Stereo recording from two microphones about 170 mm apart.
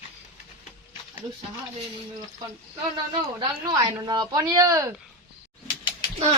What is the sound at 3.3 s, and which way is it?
Speech, 25° right (ahead or behind).